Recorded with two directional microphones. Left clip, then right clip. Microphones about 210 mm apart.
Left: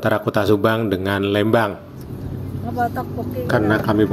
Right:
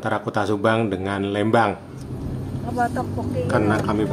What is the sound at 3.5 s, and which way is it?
Speech, 20° left (ahead or behind).